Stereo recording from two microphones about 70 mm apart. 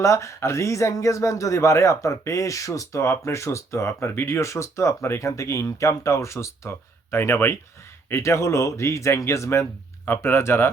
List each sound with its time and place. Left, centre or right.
0.0 s speech: left
4.4 s speech: left
8.1 s speech: left